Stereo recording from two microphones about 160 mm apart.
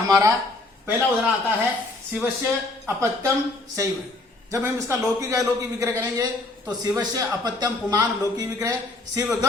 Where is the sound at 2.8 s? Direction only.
20° right (ahead or behind).